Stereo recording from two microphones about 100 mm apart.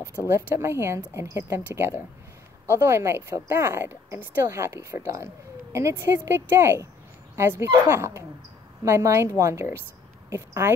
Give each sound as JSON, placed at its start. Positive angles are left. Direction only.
{"t": 0.0, "sound": "speech", "side_deg": 25}
{"t": 0.3, "sound": "a woman's voice", "side_deg": -25}